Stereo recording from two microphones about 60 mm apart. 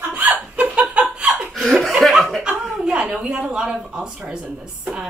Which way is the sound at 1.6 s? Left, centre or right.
Centre.